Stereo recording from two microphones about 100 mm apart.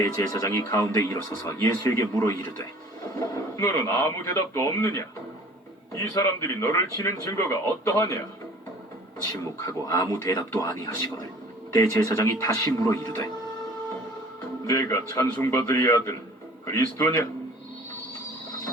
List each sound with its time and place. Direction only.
0.0 s speech: 30° left (ahead or behind)
9.4 s speech: 35° left (ahead or behind)
14.7 s speech: 35° left (ahead or behind)